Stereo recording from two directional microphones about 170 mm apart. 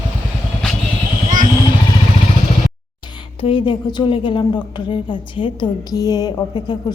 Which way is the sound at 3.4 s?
30° left (ahead or behind).